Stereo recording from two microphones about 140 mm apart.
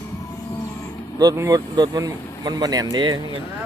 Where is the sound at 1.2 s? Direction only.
25° right (ahead or behind).